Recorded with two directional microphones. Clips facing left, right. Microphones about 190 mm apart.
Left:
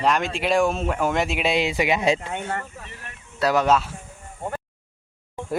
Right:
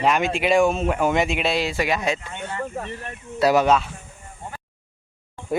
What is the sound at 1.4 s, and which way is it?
Speech, 15° left (ahead or behind).